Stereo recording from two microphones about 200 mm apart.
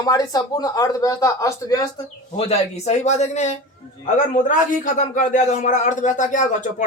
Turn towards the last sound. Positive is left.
turn(degrees=40)  # may be behind; listen again after turning